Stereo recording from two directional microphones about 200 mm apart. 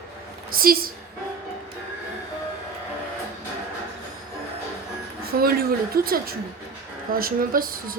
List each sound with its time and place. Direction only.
0.5 s a woman's voice: 45° right (ahead or behind)
5.2 s a woman's voice: 50° right (ahead or behind)